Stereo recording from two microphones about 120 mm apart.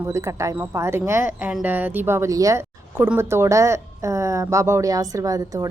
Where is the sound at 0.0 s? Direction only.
25° right (ahead or behind).